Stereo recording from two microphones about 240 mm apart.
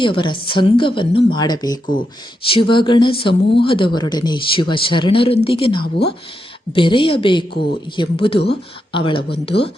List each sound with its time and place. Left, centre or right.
0.0 s speech: centre
5.8 s speech: left
6.7 s speech: left